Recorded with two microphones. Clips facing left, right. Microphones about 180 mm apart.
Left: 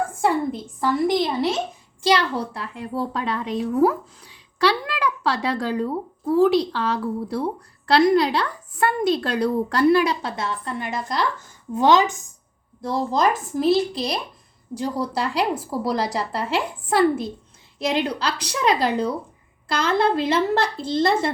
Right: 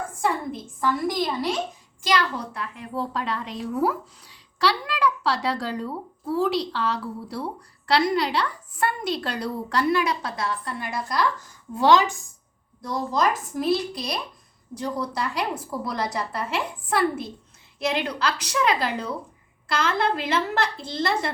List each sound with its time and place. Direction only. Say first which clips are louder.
0.3 s a woman's voice: left 4 dB; 30° left (ahead or behind)
3.1 s a child's voice: left 4 dB; 50° left (ahead or behind)
9.9 s a woman's voice: left 5 dB; 30° left (ahead or behind)